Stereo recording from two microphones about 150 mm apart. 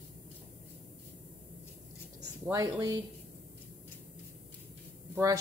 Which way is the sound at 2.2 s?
25° right (ahead or behind).